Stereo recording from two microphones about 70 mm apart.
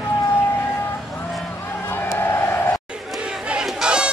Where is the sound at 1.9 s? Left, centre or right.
Left.